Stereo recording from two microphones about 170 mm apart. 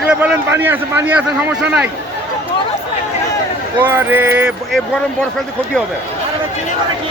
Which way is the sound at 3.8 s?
10° right (ahead or behind).